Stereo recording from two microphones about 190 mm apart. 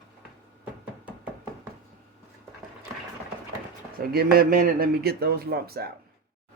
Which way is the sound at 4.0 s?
55° right (ahead or behind).